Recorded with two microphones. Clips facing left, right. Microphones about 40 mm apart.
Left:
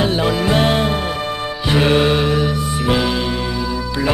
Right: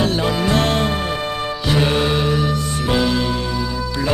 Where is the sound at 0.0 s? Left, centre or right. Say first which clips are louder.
Left 2 dB; centre.